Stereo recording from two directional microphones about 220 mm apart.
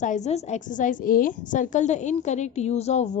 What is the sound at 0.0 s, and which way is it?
A woman's voice, 35° left (ahead or behind).